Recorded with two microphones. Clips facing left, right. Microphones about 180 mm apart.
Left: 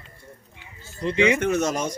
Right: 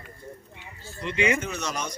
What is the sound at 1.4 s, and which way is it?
Speech, 50° left (ahead or behind).